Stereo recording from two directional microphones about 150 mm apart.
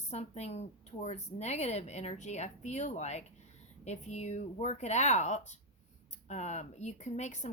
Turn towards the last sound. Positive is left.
turn(degrees=50)  # may be behind; listen again after turning